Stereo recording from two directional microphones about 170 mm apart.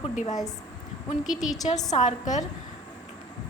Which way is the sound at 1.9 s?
45° left (ahead or behind).